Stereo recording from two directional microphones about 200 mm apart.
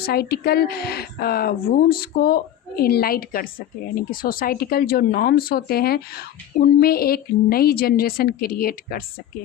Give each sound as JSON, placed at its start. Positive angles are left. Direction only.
{"t": 0.0, "sound": "speech", "side_deg": 50}